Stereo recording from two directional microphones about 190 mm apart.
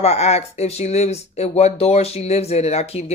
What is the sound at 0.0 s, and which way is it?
Speech, 35° left (ahead or behind).